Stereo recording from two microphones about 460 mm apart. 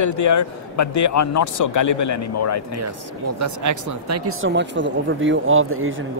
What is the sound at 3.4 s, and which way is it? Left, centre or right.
Speech, right.